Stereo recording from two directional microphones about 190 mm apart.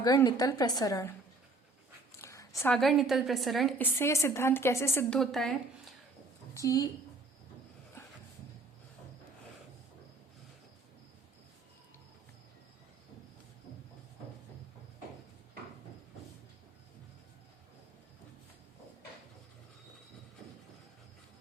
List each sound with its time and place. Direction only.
0.0 s a woman's voice: 20° left (ahead or behind)
2.2 s a sound: 15° left (ahead or behind)
2.7 s a woman's voice: centre (ahead or behind)
5.2 s speech: centre (ahead or behind)
6.5 s a woman's voice: 15° left (ahead or behind)